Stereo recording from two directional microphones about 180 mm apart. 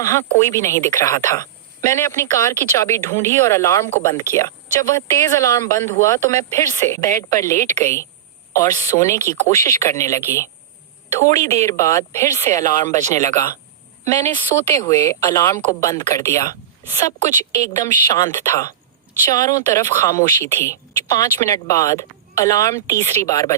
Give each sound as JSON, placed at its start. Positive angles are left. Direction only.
{"t": 0.0, "sound": "speech", "side_deg": 15}